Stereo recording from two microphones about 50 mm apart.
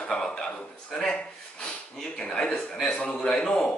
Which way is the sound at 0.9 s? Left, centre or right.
Centre.